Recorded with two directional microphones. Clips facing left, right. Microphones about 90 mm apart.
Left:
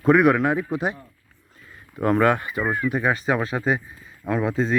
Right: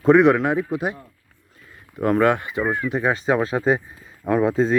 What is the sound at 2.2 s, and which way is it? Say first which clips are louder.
Speech: right 1 dB; 15° right (ahead or behind).